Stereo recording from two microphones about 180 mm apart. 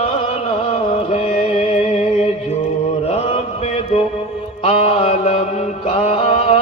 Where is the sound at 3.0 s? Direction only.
35° left (ahead or behind).